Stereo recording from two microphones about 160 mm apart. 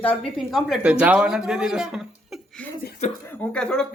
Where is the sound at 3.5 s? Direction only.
5° left (ahead or behind).